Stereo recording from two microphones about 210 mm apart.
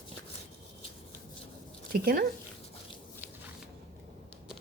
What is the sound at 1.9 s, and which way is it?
Speech, 45° right (ahead or behind).